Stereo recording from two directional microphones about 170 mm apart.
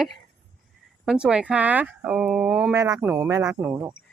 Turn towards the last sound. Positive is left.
turn(degrees=-10)  # may be behind; listen again after turning